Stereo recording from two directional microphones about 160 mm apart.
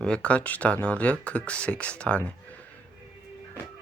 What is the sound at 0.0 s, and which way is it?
Speech, 5° left (ahead or behind).